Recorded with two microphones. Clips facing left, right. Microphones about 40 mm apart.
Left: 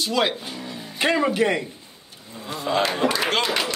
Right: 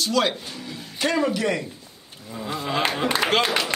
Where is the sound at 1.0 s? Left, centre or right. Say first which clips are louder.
Left 2 dB; left.